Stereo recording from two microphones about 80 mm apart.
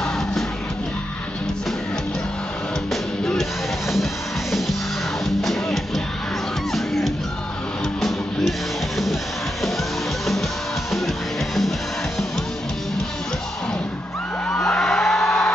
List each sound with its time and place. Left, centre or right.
2.9 s music: centre
14.5 s whoop: centre